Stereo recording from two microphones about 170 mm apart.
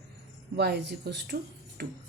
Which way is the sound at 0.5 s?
85° right.